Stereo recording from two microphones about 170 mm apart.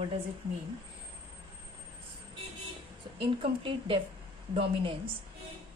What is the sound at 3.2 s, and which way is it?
A woman's voice, 30° right (ahead or behind).